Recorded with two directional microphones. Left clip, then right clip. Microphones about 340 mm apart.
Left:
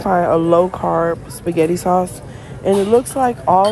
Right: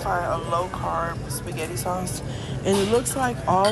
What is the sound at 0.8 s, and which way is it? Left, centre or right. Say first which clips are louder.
A woman's voice: left 10 dB; left.